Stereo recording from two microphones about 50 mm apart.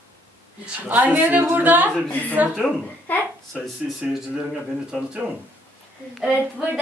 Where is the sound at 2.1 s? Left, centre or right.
Left.